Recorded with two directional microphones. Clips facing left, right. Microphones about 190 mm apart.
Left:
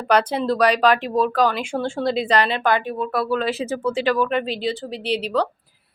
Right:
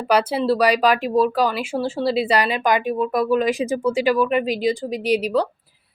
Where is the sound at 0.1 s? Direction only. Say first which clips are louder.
Right 1 dB; 5° right (ahead or behind).